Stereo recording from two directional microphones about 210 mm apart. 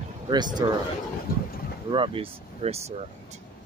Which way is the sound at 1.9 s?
25° right (ahead or behind).